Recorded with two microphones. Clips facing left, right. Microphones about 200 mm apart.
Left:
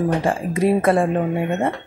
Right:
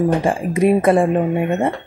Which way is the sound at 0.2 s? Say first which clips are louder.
Right 3 dB; 15° right (ahead or behind).